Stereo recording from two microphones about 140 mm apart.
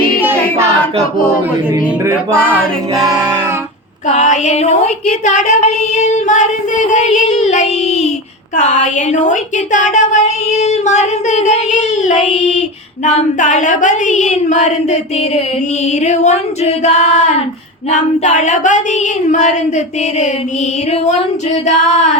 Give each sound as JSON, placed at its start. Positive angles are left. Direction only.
{"t": 2.0, "sound": "music", "side_deg": -15}
{"t": 4.1, "sound": "child singing", "side_deg": 60}
{"t": 16.0, "sound": "child singing", "side_deg": 55}
{"t": 21.8, "sound": "child singing", "side_deg": 60}